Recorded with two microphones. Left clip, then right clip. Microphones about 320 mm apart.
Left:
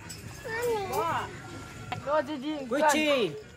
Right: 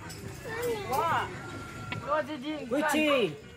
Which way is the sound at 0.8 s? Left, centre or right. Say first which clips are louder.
Right 1 dB; left.